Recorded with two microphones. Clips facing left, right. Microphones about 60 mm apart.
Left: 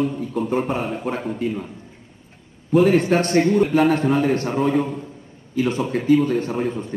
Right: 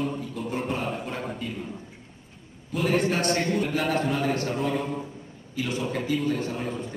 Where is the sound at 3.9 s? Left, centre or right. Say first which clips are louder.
Left 7 dB; left.